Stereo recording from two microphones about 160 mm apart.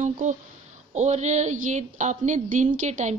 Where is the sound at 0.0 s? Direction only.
50° right (ahead or behind).